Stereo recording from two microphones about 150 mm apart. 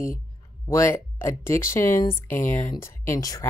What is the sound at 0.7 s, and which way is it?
Speech, 20° left (ahead or behind).